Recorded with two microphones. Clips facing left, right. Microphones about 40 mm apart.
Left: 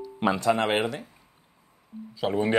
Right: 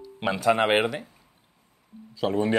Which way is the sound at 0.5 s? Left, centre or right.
Centre.